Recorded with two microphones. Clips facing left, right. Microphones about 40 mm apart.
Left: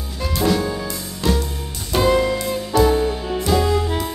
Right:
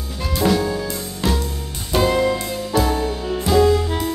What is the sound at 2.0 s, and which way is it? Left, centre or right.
Music, centre.